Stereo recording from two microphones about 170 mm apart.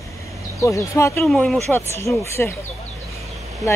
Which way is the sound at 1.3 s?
5° left (ahead or behind).